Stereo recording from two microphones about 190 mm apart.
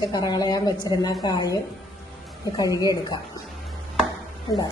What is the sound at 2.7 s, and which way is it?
Speech, 15° right (ahead or behind).